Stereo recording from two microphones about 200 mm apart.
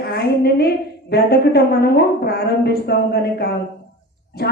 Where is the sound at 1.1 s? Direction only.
50° left (ahead or behind).